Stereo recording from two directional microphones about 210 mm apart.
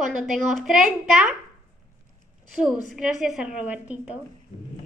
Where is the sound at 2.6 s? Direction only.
5° right (ahead or behind).